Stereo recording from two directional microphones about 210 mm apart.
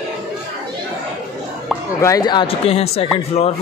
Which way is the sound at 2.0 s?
15° left (ahead or behind).